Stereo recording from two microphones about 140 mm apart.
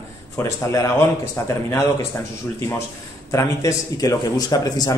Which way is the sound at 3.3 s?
25° left (ahead or behind).